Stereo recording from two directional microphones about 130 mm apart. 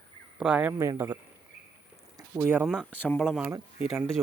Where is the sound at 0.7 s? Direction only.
25° right (ahead or behind).